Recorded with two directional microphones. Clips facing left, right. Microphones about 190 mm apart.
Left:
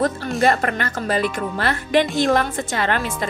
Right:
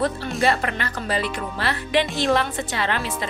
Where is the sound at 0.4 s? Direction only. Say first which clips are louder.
Left 3 dB; 50° left (ahead or behind).